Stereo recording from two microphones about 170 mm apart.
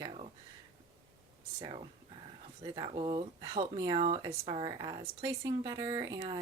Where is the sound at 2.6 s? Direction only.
30° right (ahead or behind).